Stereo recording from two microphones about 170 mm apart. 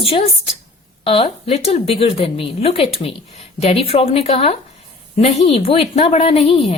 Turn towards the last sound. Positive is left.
turn(degrees=35)  # may be behind; listen again after turning